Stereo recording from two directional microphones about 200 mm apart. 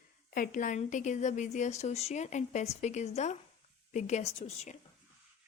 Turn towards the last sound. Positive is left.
turn(degrees=35)  # may be behind; listen again after turning